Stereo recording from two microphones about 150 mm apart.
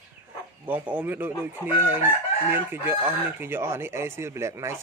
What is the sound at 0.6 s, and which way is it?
Speech, 10° right (ahead or behind).